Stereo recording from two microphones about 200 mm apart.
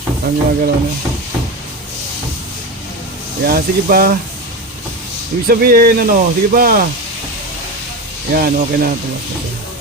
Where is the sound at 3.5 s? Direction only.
50° right (ahead or behind).